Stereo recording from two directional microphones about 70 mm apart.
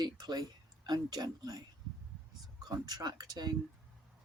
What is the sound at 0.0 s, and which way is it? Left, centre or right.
Speech, right.